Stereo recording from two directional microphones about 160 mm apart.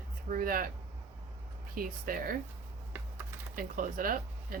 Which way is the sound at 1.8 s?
65° right (ahead or behind).